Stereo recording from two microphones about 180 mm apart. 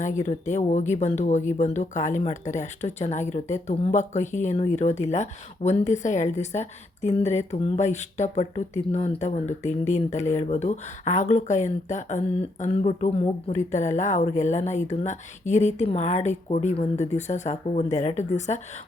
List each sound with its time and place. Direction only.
0.0 s speech: 40° left (ahead or behind)